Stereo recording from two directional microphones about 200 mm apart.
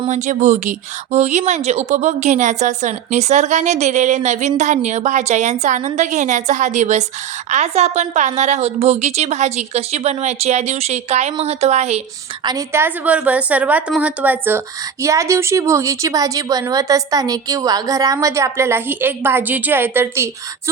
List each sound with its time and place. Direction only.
0.1 s speech: 40° right (ahead or behind)
12.5 s a woman's voice: 15° right (ahead or behind)